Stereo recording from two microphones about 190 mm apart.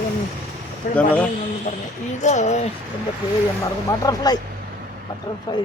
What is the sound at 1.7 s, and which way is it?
Speech, 40° left (ahead or behind).